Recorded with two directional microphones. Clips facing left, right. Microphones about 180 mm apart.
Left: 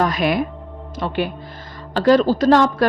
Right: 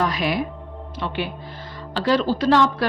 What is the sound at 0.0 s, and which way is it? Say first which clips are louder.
A woman's voice: left 4 dB; 50° left (ahead or behind).